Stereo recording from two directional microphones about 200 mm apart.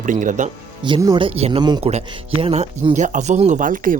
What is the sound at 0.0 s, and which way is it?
Speech, 40° right (ahead or behind).